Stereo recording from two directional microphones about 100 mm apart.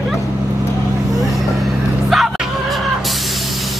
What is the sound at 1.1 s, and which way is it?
Vehicle, centre (ahead or behind).